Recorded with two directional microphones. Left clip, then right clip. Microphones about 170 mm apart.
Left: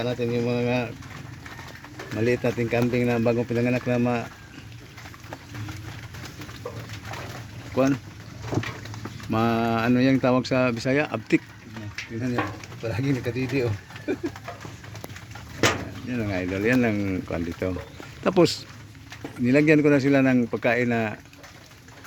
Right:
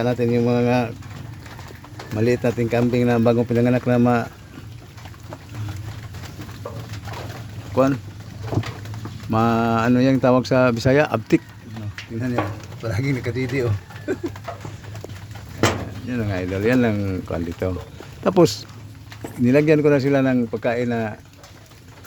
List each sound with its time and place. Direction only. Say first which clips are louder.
0.0 s speech: right 6 dB; 30° right (ahead or behind)
2.1 s speech: right 4 dB; 5° right (ahead or behind)
7.8 s speech: right 5 dB; 5° right (ahead or behind)
9.3 s speech: right 4 dB; centre (ahead or behind)
12.8 s speech: right 2 dB; 5° left (ahead or behind)
16.0 s speech: right 2 dB; 5° left (ahead or behind)
18.2 s speech: right 4 dB; 10° right (ahead or behind)
20.5 s speech: right 1 dB; 15° left (ahead or behind)